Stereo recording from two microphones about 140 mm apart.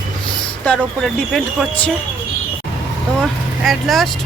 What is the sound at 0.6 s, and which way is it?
Speech, centre (ahead or behind).